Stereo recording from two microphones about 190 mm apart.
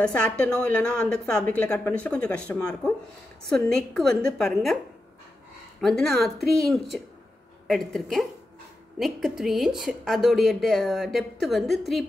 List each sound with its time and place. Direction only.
0.0 s a woman's voice: 5° left (ahead or behind)
5.8 s a woman's voice: centre (ahead or behind)